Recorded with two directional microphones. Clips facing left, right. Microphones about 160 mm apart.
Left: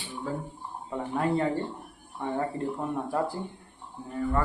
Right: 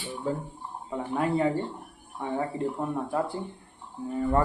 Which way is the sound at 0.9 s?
Centre (ahead or behind).